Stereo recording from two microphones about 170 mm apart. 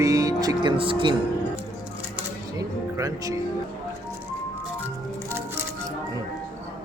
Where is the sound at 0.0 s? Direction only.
20° right (ahead or behind).